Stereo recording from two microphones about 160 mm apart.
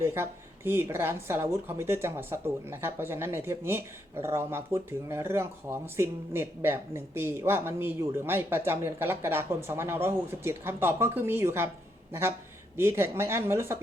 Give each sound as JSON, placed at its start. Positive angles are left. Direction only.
{"t": 0.0, "sound": "speech", "side_deg": -15}
{"t": 12.7, "sound": "speech", "side_deg": -15}